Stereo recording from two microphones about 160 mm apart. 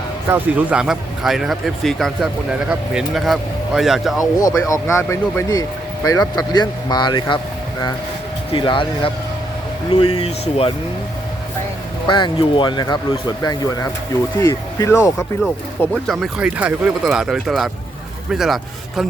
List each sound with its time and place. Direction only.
0.3 s speech: 10° right (ahead or behind)
4.4 s speech: 20° left (ahead or behind)
8.5 s speech: 30° left (ahead or behind)
10.2 s speech: 40° left (ahead or behind)
12.0 s speech: 30° left (ahead or behind)
16.0 s speech: 5° right (ahead or behind)